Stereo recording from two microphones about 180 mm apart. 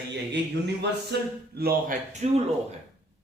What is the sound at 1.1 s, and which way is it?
Speech, 65° right (ahead or behind).